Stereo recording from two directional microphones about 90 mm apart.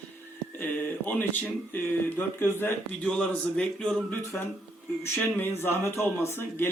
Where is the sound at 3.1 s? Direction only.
10° left (ahead or behind).